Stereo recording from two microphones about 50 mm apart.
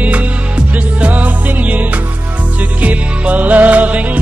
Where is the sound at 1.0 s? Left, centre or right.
Right.